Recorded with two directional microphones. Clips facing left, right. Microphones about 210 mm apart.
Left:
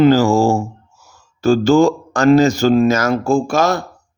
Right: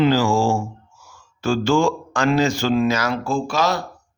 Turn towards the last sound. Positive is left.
turn(degrees=50)  # may be behind; listen again after turning